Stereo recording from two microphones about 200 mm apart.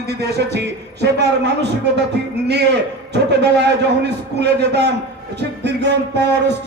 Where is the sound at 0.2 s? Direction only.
55° right (ahead or behind).